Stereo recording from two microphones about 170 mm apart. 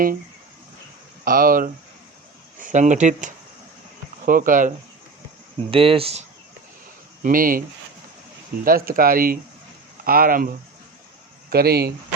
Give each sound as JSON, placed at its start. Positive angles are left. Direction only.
{"t": 1.2, "sound": "speech", "side_deg": -55}
{"t": 5.7, "sound": "speech", "side_deg": -30}
{"t": 7.2, "sound": "speech", "side_deg": -55}
{"t": 8.6, "sound": "speech", "side_deg": -60}
{"t": 11.5, "sound": "speech", "side_deg": -65}